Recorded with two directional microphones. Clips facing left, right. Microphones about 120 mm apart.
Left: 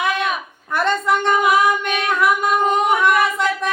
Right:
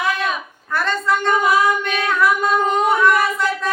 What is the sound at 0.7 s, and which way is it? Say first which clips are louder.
Female singing: left 2 dB; 20° left (ahead or behind).